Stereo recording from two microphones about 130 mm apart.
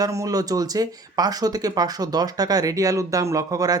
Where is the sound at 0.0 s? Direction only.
25° right (ahead or behind).